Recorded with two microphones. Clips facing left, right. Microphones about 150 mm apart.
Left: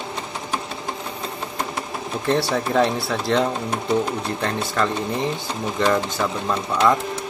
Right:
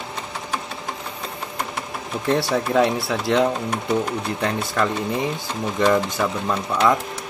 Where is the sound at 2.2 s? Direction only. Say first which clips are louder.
Even; centre (ahead or behind).